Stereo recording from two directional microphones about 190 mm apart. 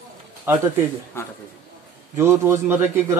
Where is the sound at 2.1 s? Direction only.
15° right (ahead or behind).